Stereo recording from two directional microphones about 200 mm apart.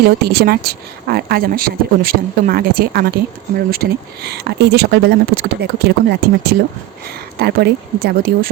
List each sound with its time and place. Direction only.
0.0 s speech: 50° right (ahead or behind)